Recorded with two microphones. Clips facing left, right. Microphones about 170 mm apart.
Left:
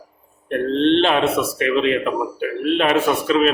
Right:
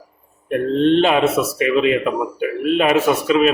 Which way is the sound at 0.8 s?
45° right (ahead or behind).